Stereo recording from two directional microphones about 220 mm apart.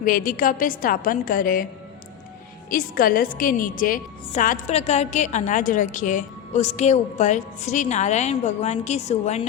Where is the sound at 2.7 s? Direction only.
40° left (ahead or behind).